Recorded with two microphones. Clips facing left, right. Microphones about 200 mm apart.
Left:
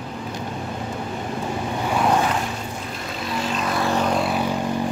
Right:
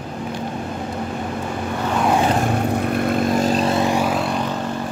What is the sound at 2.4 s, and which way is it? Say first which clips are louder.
Vehicle: right 10 dB; 60° right (ahead or behind).